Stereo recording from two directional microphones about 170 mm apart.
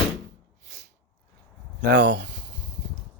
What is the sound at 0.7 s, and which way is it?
Sneeze, 90° right.